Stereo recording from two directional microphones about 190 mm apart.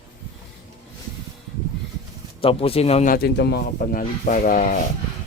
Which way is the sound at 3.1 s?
60° left (ahead or behind).